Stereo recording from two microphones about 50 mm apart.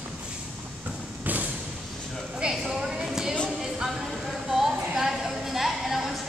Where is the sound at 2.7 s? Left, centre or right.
Centre.